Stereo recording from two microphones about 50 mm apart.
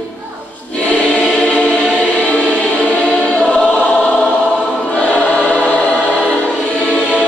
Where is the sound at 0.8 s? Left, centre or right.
Left.